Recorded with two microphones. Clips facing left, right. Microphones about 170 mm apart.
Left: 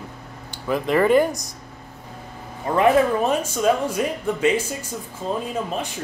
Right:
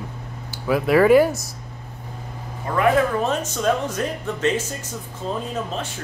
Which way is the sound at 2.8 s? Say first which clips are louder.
Left 2 dB; 10° left (ahead or behind).